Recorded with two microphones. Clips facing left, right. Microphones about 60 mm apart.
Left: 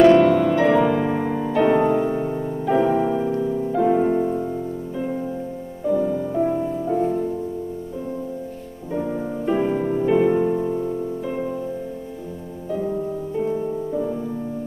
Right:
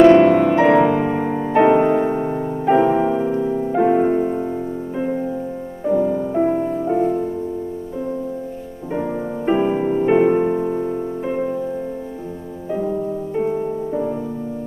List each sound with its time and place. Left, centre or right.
0.0 s music: right
1.5 s music: right
7.0 s music: right
8.9 s music: right
13.3 s music: right